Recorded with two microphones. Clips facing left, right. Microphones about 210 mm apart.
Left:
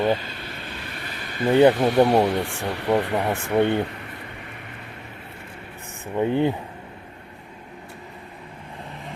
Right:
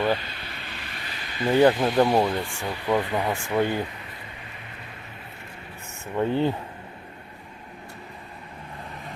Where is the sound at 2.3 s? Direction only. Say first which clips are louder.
Left 4 dB; 70° left (ahead or behind).